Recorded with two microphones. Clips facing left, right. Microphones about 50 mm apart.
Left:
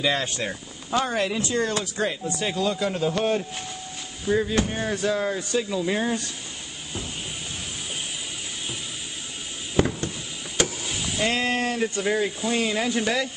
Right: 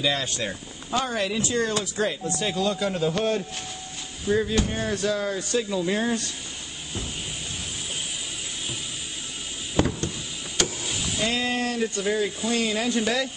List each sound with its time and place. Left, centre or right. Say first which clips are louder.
0.0 s speech: left 1 dB; left
1.5 s speech: even; centre
5.5 s speech: right 2 dB; centre
11.2 s speech: left 2 dB; left
12.4 s speech: left 1 dB; centre